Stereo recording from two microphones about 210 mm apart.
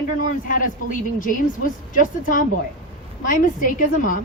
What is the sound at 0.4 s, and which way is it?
A woman's voice, 40° left (ahead or behind).